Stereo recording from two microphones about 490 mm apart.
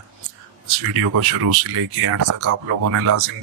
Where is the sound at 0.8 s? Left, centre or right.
Right.